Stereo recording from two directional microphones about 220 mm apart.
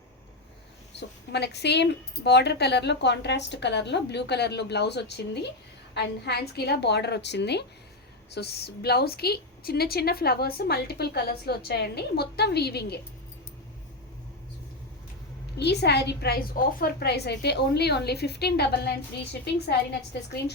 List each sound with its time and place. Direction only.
0.9 s a woman's voice: 50° left (ahead or behind)
15.5 s a woman's voice: 50° left (ahead or behind)